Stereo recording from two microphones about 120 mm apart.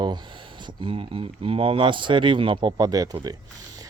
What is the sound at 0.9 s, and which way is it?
Speech, 50° right (ahead or behind).